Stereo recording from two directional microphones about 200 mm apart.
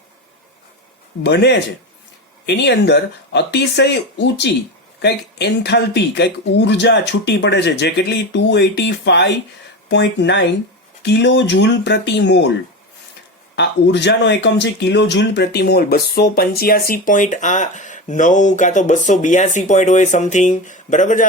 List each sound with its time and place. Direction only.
1.2 s speech: 60° left (ahead or behind)
13.6 s speech: 60° left (ahead or behind); by 21.2 s 40° left (ahead or behind)